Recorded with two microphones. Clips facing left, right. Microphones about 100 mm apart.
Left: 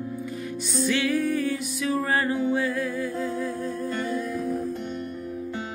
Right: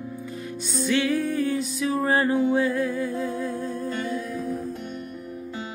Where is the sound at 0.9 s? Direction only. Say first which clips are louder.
Right 1 dB; 30° right (ahead or behind).